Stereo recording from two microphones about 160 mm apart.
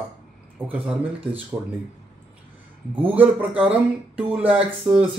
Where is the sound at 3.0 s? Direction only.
10° right (ahead or behind).